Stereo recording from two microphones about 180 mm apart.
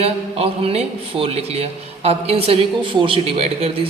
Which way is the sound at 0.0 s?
35° right (ahead or behind).